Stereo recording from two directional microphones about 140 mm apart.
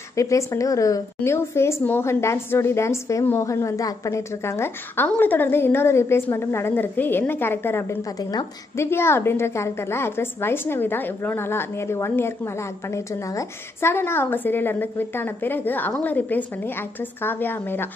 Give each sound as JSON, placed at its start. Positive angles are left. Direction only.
{"t": 0.1, "sound": "a woman's voice", "side_deg": 20}